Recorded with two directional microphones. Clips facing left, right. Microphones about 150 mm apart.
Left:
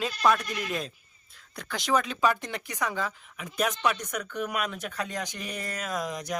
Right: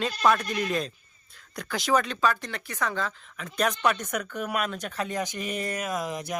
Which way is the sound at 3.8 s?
50° right (ahead or behind).